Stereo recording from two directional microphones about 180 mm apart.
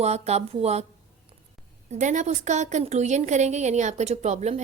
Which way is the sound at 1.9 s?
40° right (ahead or behind).